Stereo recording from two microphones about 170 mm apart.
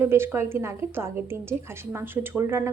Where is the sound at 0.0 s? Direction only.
15° right (ahead or behind).